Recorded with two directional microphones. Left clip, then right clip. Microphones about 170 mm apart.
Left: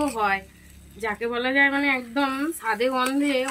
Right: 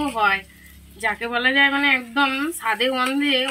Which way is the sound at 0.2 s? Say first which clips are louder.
Right 4 dB; 25° left (ahead or behind).